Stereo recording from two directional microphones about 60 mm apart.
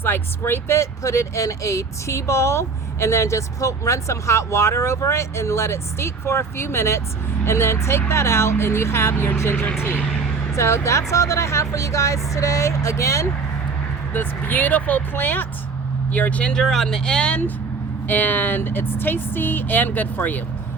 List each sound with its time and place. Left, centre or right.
0.0 s speech: left
0.8 s speech: left
10.5 s speech: left
14.1 s speech: left
16.5 s speech: centre
18.1 s speech: left